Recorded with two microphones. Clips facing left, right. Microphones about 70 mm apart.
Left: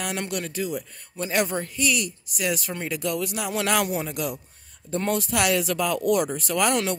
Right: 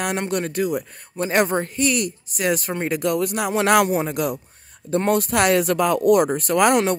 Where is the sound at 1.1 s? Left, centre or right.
Right.